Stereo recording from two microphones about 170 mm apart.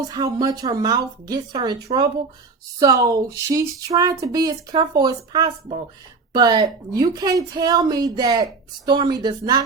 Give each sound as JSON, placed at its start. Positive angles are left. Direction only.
{"t": 0.0, "sound": "speech", "side_deg": -20}